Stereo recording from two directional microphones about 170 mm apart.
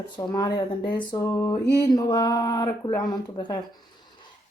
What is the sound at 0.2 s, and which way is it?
Speech, 25° left (ahead or behind).